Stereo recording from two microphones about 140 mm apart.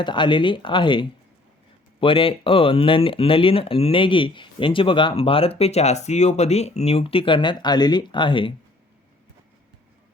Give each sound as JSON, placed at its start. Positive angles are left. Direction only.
{"t": 0.0, "sound": "speech", "side_deg": 35}